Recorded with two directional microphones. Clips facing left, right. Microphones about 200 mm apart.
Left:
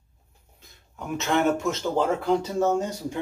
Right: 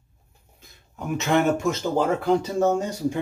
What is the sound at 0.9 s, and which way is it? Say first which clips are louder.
Speech: right 3 dB; 10° right (ahead or behind).